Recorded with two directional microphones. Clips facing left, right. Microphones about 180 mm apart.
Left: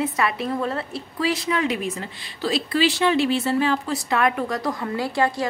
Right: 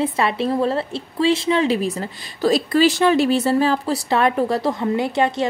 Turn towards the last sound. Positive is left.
turn(degrees=-20)  # may be behind; listen again after turning